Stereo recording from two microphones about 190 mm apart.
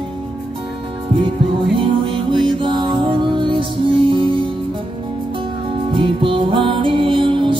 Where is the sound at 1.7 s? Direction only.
25° right (ahead or behind).